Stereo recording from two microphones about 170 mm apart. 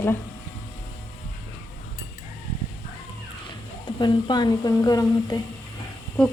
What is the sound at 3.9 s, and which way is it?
A woman's voice, 25° left (ahead or behind).